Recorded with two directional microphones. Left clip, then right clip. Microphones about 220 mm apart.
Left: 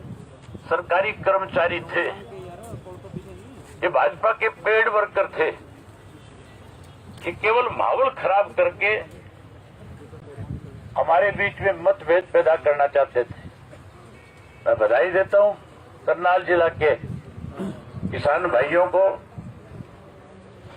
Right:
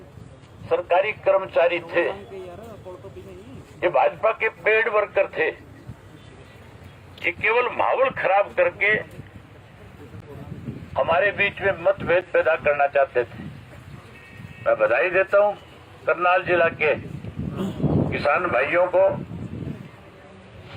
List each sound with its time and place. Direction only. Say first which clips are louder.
0.7 s speech: right 1 dB; centre (ahead or behind)
3.8 s speech: even; 5° right (ahead or behind)
7.3 s speech: even; centre (ahead or behind)
10.9 s a man's voice: left 1 dB; 25° right (ahead or behind)
14.6 s a man's voice: left 1 dB; 40° right (ahead or behind)
18.1 s a man's voice: left 3 dB; 40° right (ahead or behind)